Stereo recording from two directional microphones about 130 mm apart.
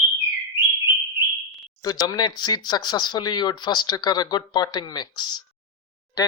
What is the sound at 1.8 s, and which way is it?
Speech, 30° left (ahead or behind).